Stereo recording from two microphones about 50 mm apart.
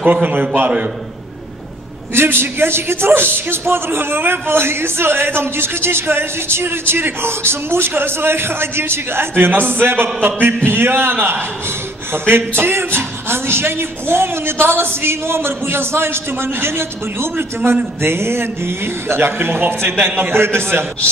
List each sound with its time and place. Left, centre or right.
0.0 s a man's voice: right
2.1 s a man's voice: right